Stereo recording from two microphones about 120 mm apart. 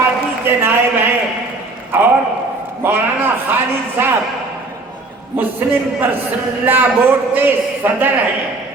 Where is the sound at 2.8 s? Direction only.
15° right (ahead or behind).